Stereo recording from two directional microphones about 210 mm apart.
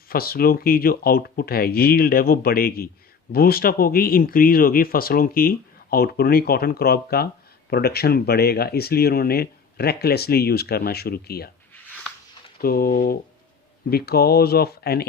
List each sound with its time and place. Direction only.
0.1 s speech: 45° left (ahead or behind)
12.5 s speech: 45° left (ahead or behind)